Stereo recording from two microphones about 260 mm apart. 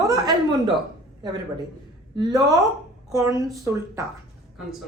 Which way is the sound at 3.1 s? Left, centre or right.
Centre.